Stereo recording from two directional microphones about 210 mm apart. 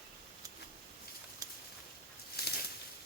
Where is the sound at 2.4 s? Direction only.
50° left (ahead or behind).